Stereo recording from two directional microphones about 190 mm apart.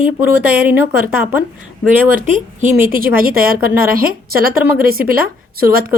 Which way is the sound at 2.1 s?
40° right (ahead or behind).